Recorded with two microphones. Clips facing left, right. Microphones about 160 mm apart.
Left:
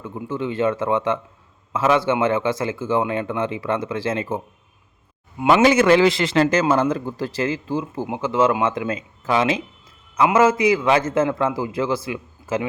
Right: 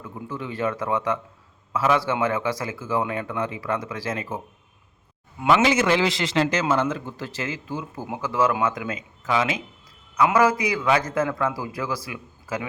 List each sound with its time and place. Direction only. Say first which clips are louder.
0.0 s a man's voice: left 7 dB; 25° left (ahead or behind)
5.6 s a man's voice: left 6 dB; 55° left (ahead or behind); by 8.0 s 35° left (ahead or behind)
8.0 s a man's voice: left 3 dB; 20° left (ahead or behind)